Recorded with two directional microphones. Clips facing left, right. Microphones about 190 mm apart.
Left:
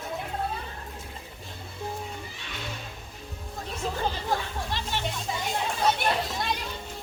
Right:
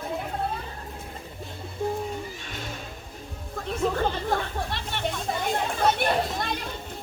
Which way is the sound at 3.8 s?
55° right (ahead or behind).